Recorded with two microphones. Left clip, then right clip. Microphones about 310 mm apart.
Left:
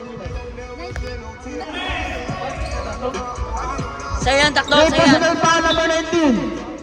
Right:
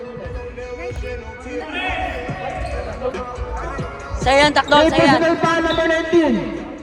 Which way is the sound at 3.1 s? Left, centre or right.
Centre.